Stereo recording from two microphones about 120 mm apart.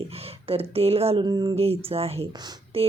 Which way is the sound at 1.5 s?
55° right (ahead or behind).